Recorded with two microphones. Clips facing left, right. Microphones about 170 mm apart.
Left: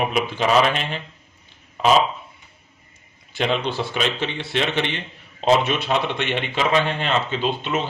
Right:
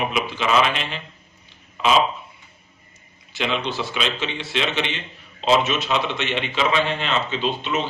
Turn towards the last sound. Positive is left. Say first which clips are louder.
# left 1 dB
turn(degrees=50)  # may be behind; listen again after turning